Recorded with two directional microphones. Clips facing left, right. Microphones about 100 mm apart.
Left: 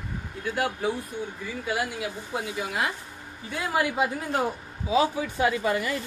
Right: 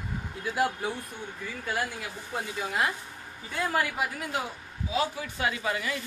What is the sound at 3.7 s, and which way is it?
Speech, 20° left (ahead or behind).